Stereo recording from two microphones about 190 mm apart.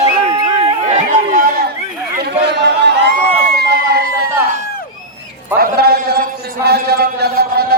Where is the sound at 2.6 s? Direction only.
65° right (ahead or behind).